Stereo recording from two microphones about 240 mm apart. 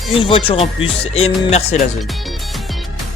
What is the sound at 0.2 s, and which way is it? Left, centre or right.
Music, left.